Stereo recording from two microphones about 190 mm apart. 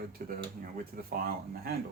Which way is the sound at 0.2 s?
55° right (ahead or behind).